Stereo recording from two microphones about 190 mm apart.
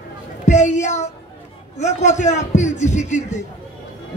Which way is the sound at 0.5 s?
40° left (ahead or behind).